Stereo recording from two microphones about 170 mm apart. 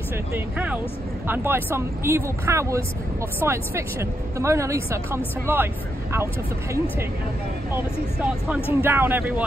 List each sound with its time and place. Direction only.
0.3 s a woman's voice: 10° right (ahead or behind)
7.7 s a woman's voice: 10° right (ahead or behind)